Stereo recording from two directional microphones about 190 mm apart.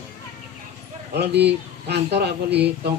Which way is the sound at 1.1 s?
60° right (ahead or behind).